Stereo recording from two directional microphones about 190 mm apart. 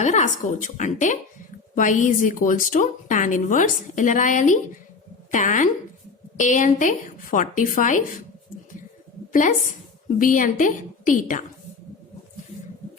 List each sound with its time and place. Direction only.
0.0 s a woman's voice: 40° left (ahead or behind)
10.2 s a woman's voice: 45° left (ahead or behind)